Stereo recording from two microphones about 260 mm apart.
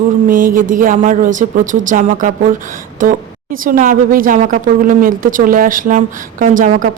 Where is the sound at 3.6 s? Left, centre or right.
Right.